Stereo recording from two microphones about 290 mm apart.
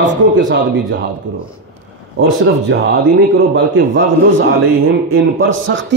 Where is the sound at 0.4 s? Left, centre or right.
Right.